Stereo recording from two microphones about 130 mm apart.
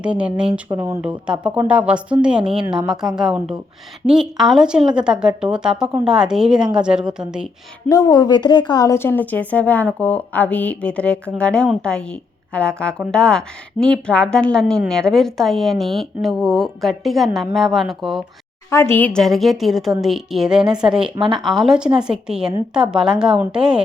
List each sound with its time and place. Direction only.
0.0 s a woman's voice: 10° right (ahead or behind)
7.9 s speech: 30° left (ahead or behind)
9.0 s a woman's voice: 15° left (ahead or behind); by 18.2 s centre (ahead or behind)
18.7 s a woman's voice: 20° left (ahead or behind); by 23.8 s 5° right (ahead or behind)